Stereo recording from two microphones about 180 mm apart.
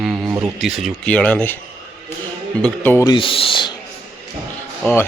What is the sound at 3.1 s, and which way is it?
Speech, 30° left (ahead or behind).